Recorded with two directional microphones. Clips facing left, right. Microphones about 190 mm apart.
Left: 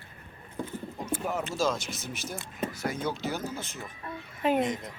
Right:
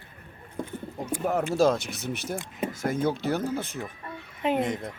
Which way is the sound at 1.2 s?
55° right (ahead or behind).